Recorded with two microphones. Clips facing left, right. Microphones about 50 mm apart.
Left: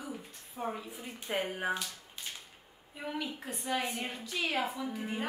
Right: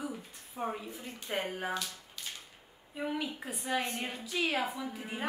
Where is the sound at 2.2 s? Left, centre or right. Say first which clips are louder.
Even; left.